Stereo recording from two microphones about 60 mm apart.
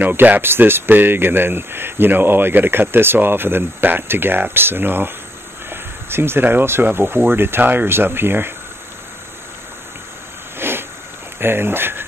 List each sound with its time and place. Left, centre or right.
0.0 s speech: right
10.6 s a sound: right
11.3 s speech: right